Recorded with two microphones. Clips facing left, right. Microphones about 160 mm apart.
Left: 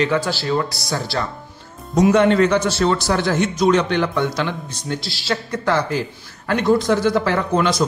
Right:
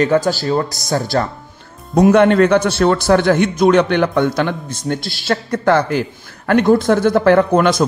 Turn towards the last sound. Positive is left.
turn(degrees=-55)  # may be behind; listen again after turning